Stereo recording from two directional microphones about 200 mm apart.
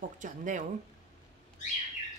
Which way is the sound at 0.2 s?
40° right (ahead or behind).